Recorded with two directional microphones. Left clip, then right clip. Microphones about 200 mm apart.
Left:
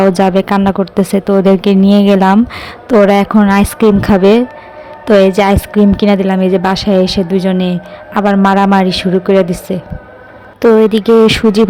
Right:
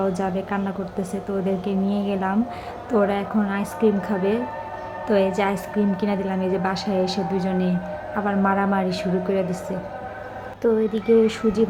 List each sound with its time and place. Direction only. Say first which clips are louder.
0.0 s a woman's voice: left 15 dB; 50° left (ahead or behind)